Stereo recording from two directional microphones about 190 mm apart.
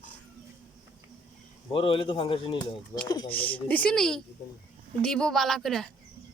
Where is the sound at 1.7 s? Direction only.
25° left (ahead or behind).